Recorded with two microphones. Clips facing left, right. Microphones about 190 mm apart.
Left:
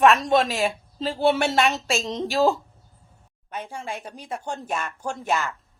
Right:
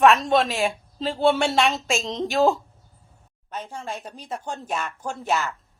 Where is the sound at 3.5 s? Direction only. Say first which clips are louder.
Even; 15° left (ahead or behind).